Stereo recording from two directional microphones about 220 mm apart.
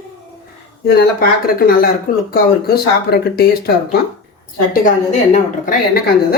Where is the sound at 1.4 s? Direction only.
40° left (ahead or behind).